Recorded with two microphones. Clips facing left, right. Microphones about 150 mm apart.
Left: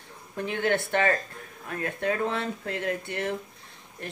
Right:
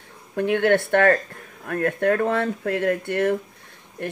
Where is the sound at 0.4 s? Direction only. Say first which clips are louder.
Right 8 dB; 65° right (ahead or behind).